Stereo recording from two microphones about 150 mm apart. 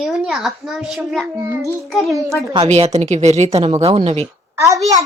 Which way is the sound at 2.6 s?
45° right (ahead or behind).